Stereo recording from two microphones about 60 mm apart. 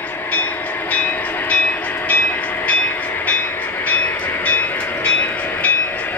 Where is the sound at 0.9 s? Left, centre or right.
Left.